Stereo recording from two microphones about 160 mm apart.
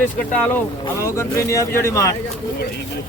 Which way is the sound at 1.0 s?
20° left (ahead or behind).